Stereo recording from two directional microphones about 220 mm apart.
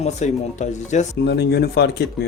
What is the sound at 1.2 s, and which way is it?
Speech, 45° left (ahead or behind).